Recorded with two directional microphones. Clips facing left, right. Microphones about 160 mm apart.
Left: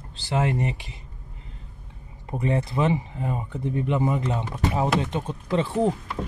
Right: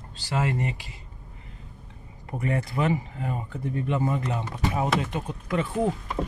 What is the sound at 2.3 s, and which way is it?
Speech, 25° left (ahead or behind).